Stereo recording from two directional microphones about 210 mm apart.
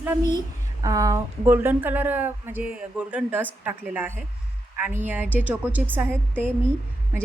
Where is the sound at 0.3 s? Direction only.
20° right (ahead or behind).